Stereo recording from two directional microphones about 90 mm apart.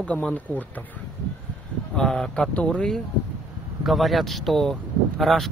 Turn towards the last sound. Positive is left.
turn(degrees=0)  # may be behind; listen again after turning